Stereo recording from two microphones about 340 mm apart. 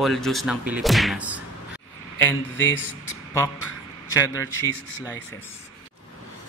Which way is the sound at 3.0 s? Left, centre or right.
Centre.